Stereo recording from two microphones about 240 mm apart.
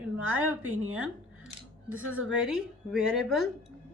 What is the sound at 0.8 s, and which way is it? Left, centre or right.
Speech, right.